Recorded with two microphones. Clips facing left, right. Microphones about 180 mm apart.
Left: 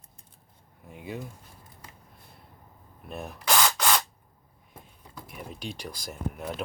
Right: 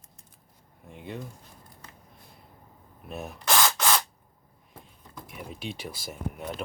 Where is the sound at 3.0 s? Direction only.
Centre (ahead or behind).